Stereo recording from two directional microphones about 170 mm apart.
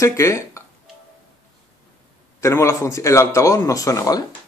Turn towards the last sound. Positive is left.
turn(degrees=20)  # may be behind; listen again after turning